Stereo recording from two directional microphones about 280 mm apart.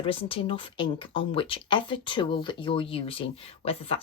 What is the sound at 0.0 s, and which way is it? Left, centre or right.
Speech, centre.